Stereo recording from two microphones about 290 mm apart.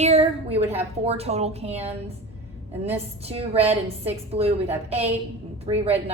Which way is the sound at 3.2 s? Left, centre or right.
Right.